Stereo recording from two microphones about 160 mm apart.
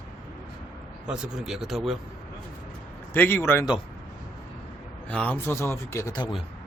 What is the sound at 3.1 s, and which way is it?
Speech, 15° left (ahead or behind).